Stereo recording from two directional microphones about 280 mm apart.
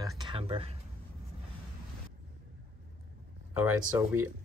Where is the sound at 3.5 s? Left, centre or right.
Centre.